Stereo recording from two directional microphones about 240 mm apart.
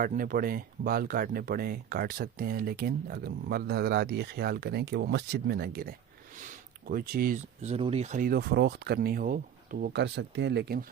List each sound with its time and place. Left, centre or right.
0.0 s speech: right